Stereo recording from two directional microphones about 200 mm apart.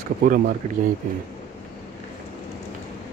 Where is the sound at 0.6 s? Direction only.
30° right (ahead or behind).